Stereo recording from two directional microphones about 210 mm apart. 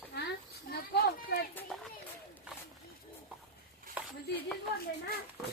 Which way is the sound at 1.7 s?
Centre (ahead or behind).